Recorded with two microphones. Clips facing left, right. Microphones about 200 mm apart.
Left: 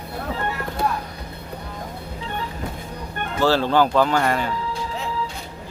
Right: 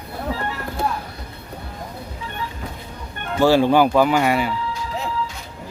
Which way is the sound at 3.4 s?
15° right (ahead or behind).